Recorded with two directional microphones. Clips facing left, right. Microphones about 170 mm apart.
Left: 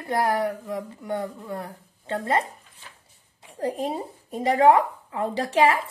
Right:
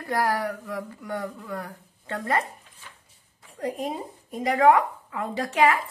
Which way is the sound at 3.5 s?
30° left (ahead or behind).